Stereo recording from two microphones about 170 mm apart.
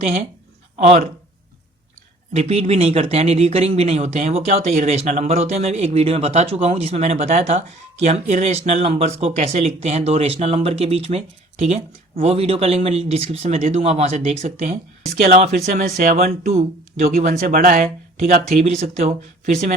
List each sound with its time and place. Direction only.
0.8 s speech: 40° right (ahead or behind)
2.3 s speech: 40° right (ahead or behind)
15.6 s speech: 55° right (ahead or behind)
16.5 s speech: 40° right (ahead or behind)
17.1 s speech: 55° right (ahead or behind)
18.6 s speech: 40° right (ahead or behind)